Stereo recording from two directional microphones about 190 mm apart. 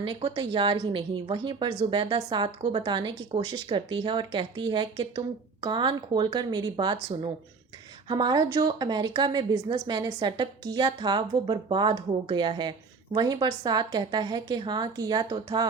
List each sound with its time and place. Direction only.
0.0 s speech: 30° right (ahead or behind)